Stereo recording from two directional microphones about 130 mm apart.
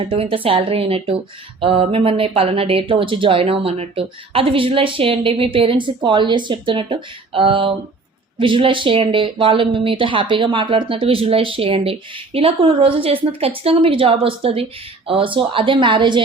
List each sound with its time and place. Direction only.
0.0 s speech: 40° right (ahead or behind)